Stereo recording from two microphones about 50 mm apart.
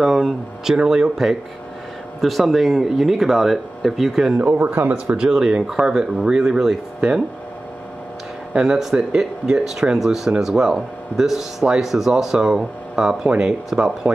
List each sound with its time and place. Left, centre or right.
0.0 s a sound: centre
0.8 s speech: centre
4.4 s speech: right
5.1 s speech: centre
8.6 s speech: centre